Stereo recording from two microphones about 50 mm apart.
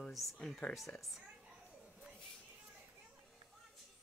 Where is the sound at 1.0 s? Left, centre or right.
Centre.